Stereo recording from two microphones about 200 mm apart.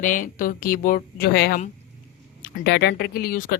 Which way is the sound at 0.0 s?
40° left (ahead or behind).